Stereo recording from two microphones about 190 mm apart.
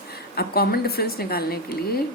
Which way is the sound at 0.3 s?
55° left (ahead or behind).